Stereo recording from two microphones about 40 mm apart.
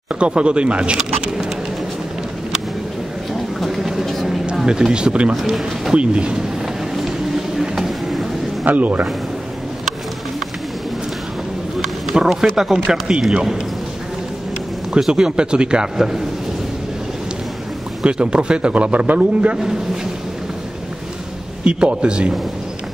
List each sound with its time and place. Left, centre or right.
0.2 s speech: right
3.8 s a sound: centre
4.6 s speech: centre
5.3 s a man's voice: centre
5.9 s speech: right
7.0 s a sound: centre
8.6 s speech: right
12.1 s speech: right
12.5 s speech: centre
13.3 s speech: right
15.0 s speech: centre
18.0 s a man's voice: right
21.6 s speech: right